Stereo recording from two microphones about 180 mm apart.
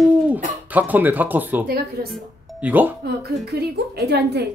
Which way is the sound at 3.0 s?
60° right (ahead or behind).